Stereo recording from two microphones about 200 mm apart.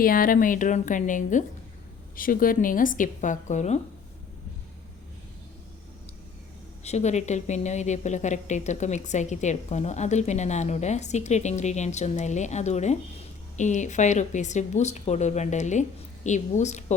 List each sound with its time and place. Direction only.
0.0 s a woman's voice: 45° left (ahead or behind)
6.8 s a woman's voice: 35° left (ahead or behind)